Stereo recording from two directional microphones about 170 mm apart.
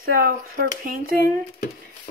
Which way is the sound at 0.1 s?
60° right (ahead or behind).